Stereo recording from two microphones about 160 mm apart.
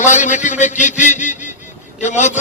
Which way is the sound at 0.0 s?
50° left (ahead or behind).